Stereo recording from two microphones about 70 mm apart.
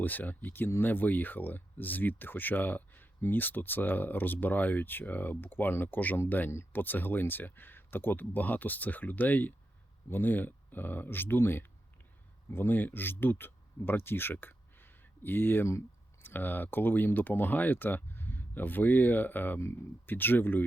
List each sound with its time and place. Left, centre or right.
0.0 s speech: left